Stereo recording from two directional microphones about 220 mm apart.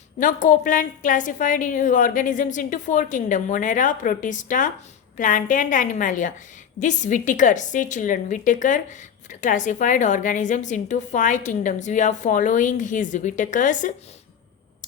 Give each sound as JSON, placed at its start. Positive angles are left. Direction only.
{"t": 0.2, "sound": "a woman's voice", "side_deg": 35}